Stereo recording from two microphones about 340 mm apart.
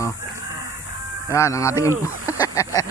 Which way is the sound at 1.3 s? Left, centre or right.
Centre.